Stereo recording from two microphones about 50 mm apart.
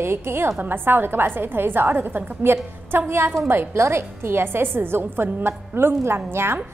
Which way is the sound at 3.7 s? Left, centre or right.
Right.